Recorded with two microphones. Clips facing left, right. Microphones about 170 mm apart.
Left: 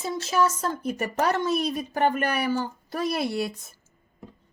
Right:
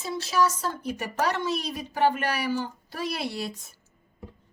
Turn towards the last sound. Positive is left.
turn(degrees=50)  # may be behind; listen again after turning